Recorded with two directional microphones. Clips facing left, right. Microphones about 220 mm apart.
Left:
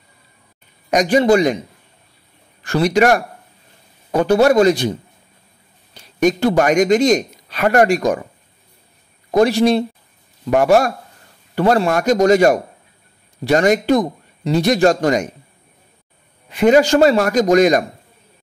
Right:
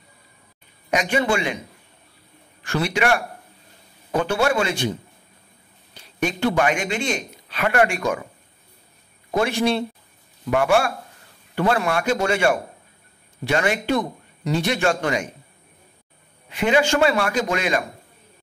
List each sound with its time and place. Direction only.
0.8 s speech: 40° left (ahead or behind)
2.6 s speech: 40° left (ahead or behind)
6.1 s speech: 40° left (ahead or behind)
9.3 s speech: 35° left (ahead or behind)
16.5 s speech: 40° left (ahead or behind)